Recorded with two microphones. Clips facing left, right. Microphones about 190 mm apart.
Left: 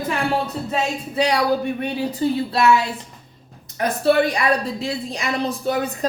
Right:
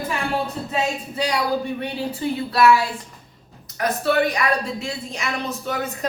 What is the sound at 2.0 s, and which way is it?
Speech, 40° left (ahead or behind).